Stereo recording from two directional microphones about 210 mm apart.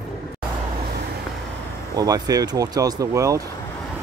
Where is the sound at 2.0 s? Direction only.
15° right (ahead or behind).